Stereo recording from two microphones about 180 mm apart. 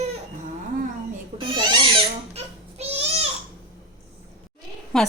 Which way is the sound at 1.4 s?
25° right (ahead or behind).